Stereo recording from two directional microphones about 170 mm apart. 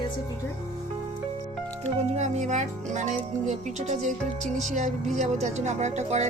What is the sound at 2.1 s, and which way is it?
A woman's voice, 45° right (ahead or behind).